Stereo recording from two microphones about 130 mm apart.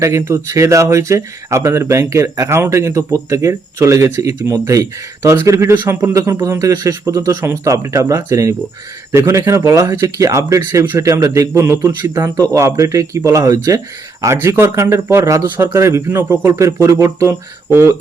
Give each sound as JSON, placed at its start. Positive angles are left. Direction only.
{"t": 0.0, "sound": "speech", "side_deg": -20}